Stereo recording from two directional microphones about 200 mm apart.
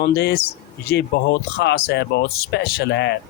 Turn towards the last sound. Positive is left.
turn(degrees=60)  # may be behind; listen again after turning